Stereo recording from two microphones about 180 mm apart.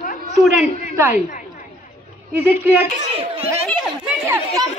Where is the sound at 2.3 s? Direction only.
15° right (ahead or behind).